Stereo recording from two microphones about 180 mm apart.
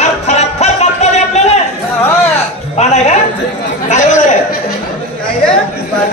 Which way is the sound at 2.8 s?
40° left (ahead or behind).